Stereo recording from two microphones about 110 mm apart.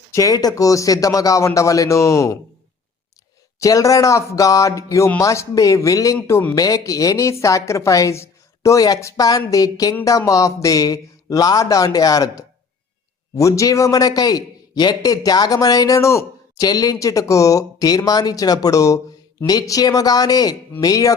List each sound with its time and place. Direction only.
0.1 s a man's voice: 30° left (ahead or behind)
3.6 s a man's voice: 30° left (ahead or behind)